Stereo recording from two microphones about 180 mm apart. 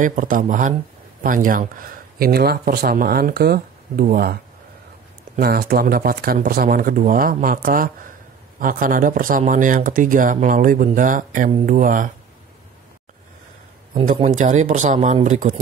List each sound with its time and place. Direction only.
0.0 s speech: 45° right (ahead or behind)
14.0 s speech: 40° right (ahead or behind)